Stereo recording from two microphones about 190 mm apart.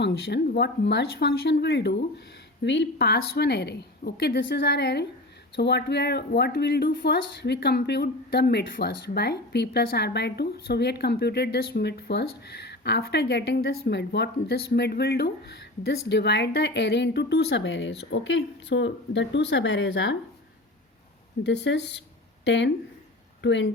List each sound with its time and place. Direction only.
0.0 s speech: 60° left (ahead or behind)
4.4 s speech: 65° left (ahead or behind)
21.4 s speech: 65° left (ahead or behind)